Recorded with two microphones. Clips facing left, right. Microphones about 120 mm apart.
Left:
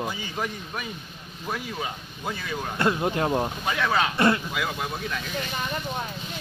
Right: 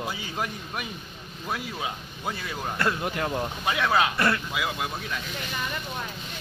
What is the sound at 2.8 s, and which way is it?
Speech, 25° left (ahead or behind).